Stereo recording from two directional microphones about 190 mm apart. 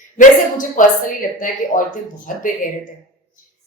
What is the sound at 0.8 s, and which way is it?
Speech, 45° left (ahead or behind).